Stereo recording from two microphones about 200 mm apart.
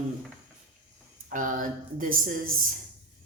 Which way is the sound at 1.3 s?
40° right (ahead or behind).